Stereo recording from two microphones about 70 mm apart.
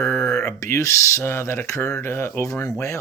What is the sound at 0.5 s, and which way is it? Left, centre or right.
Speech, left.